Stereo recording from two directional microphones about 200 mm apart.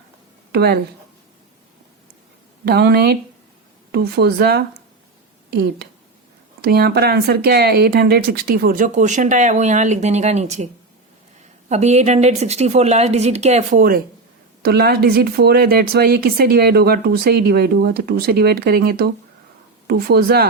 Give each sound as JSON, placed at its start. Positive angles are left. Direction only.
{"t": 0.5, "sound": "speech", "side_deg": -55}
{"t": 2.6, "sound": "speech", "side_deg": -55}
{"t": 6.6, "sound": "speech", "side_deg": -50}
{"t": 11.7, "sound": "speech", "side_deg": -35}